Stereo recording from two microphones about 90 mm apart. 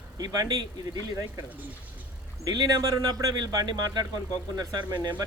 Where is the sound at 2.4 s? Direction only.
45° right (ahead or behind).